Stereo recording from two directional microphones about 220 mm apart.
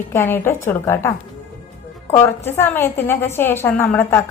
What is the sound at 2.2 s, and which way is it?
A woman's voice, 10° left (ahead or behind).